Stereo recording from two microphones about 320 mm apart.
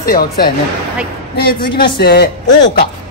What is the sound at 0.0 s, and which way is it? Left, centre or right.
Speech, left.